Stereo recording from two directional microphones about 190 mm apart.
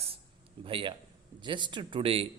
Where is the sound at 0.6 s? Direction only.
25° right (ahead or behind).